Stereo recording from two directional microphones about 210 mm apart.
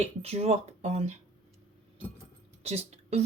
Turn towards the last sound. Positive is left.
turn(degrees=-30)  # may be behind; listen again after turning